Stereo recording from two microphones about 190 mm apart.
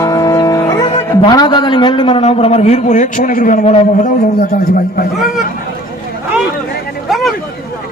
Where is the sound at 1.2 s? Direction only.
20° left (ahead or behind); by 4.1 s 40° left (ahead or behind).